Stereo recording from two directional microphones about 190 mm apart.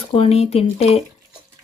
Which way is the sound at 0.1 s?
30° left (ahead or behind).